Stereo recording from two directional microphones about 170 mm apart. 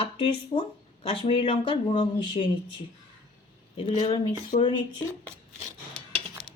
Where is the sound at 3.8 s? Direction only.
30° left (ahead or behind).